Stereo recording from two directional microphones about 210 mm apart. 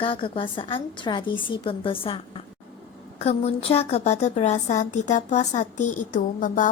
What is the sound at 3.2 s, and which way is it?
A woman's voice, 30° left (ahead or behind).